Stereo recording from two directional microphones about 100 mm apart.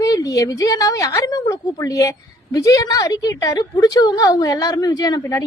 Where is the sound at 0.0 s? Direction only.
35° left (ahead or behind).